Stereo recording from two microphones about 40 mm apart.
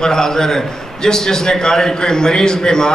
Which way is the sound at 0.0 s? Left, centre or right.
Centre.